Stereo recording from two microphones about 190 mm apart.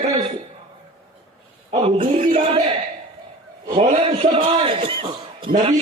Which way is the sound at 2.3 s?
25° right (ahead or behind).